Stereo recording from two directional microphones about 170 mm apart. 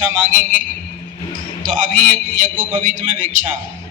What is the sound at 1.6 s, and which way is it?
A man's voice, 50° right (ahead or behind).